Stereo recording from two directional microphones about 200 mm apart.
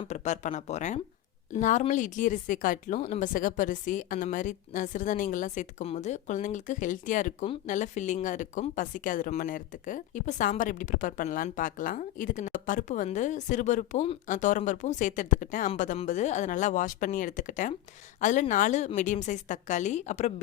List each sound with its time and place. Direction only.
0.0 s speech: 35° left (ahead or behind)